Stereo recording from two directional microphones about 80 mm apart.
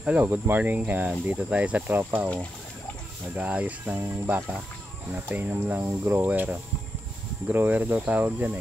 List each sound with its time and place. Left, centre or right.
0.0 s speech: centre
3.3 s speech: centre
4.0 s speech: right